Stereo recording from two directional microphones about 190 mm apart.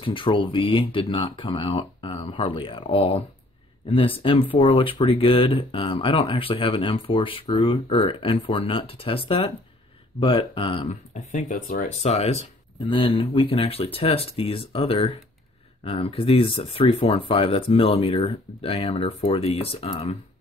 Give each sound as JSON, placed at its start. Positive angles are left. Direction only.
{"t": 0.0, "sound": "speech", "side_deg": 25}